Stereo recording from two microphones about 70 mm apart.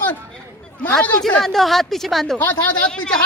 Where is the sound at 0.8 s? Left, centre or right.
Centre.